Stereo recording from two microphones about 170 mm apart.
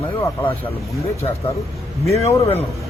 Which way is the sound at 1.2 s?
30° left (ahead or behind).